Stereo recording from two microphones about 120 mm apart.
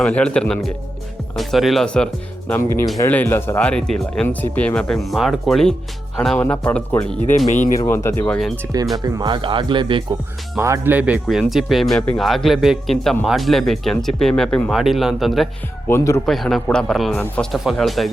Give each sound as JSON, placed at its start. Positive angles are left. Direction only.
{"t": 0.0, "sound": "speech", "side_deg": 10}
{"t": 2.5, "sound": "speech", "side_deg": 20}
{"t": 7.3, "sound": "speech", "side_deg": 90}
{"t": 7.8, "sound": "speech", "side_deg": 20}
{"t": 9.0, "sound": "speech", "side_deg": -30}
{"t": 10.6, "sound": "speech", "side_deg": -20}
{"t": 15.9, "sound": "speech", "side_deg": 20}
{"t": 16.2, "sound": "speech", "side_deg": 0}